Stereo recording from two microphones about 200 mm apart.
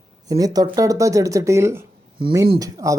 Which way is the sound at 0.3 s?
20° right (ahead or behind).